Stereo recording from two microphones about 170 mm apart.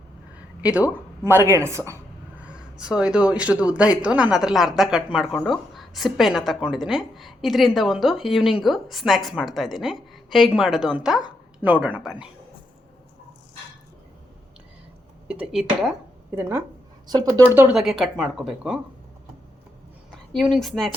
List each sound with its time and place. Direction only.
0.6 s speech: 5° right (ahead or behind)
2.4 s a woman's voice: 5° right (ahead or behind)
15.3 s a woman's voice: 5° right (ahead or behind)
16.3 s speech: 15° right (ahead or behind)
17.4 s a woman's voice: 10° right (ahead or behind)
20.3 s a woman's voice: centre (ahead or behind)